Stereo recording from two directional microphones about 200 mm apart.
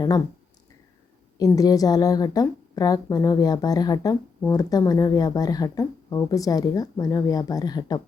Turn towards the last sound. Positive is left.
turn(degrees=20)  # may be behind; listen again after turning